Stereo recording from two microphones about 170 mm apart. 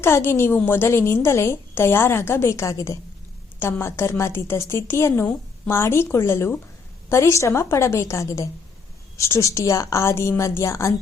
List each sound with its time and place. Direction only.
0.0 s a woman's voice: 15° left (ahead or behind)